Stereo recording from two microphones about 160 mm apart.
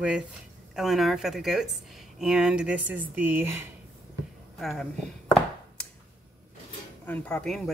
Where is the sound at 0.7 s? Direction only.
Centre (ahead or behind).